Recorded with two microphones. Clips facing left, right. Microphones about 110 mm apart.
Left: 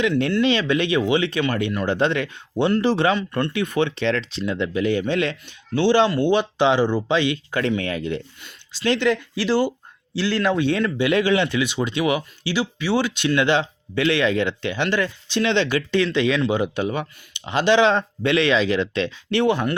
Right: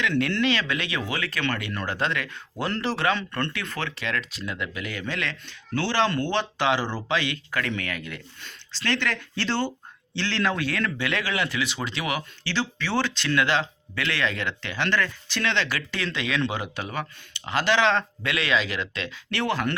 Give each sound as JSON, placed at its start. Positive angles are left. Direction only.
{"t": 0.4, "sound": "speech", "side_deg": 20}
{"t": 3.2, "sound": "speech", "side_deg": 15}
{"t": 8.4, "sound": "speech", "side_deg": 15}
{"t": 10.6, "sound": "speech", "side_deg": 20}